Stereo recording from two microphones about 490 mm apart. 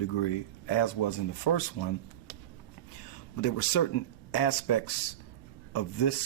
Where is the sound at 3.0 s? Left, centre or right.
Left.